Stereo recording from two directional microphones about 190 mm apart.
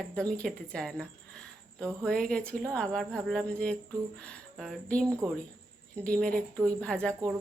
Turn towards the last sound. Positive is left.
turn(degrees=5)  # may be behind; listen again after turning